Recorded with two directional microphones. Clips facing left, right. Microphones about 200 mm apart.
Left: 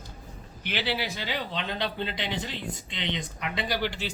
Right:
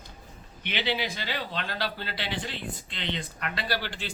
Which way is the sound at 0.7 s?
10° left (ahead or behind).